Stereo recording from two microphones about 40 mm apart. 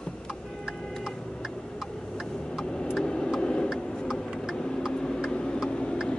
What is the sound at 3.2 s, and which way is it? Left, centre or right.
Tick-tock, centre.